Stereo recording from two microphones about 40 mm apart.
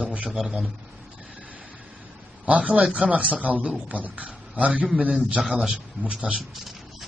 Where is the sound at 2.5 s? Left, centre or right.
Right.